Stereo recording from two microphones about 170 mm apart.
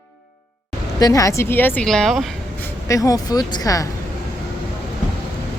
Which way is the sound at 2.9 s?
20° left (ahead or behind).